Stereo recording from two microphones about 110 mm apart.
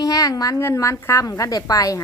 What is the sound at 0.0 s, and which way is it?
A woman's voice, 35° left (ahead or behind).